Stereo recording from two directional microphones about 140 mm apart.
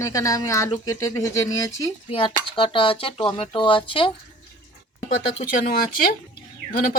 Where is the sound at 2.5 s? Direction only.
35° left (ahead or behind).